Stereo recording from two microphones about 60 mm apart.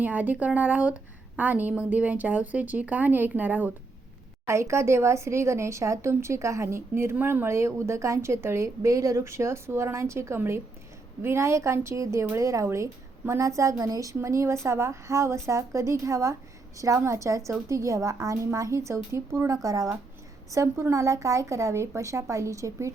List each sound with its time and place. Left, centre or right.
0.0 s speech: right
4.4 s speech: right
13.6 s a woman's voice: right
14.2 s a woman's voice: right
19.6 s a woman's voice: right
20.5 s a woman's voice: right